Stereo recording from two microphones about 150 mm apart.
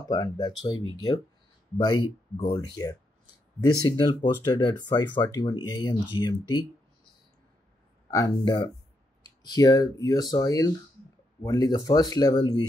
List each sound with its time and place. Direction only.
0.1 s speech: 25° left (ahead or behind)
8.1 s speech: 25° left (ahead or behind)